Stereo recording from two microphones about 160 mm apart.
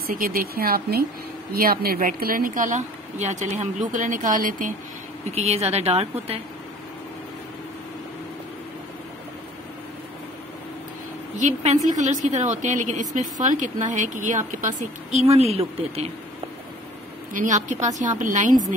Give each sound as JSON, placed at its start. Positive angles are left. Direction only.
{"t": 0.0, "sound": "speech", "side_deg": -65}
{"t": 5.3, "sound": "a woman's voice", "side_deg": -40}
{"t": 11.3, "sound": "a woman's voice", "side_deg": -50}
{"t": 17.3, "sound": "a woman's voice", "side_deg": -55}